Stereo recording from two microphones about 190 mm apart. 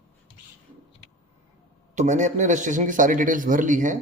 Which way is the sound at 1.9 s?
40° right (ahead or behind).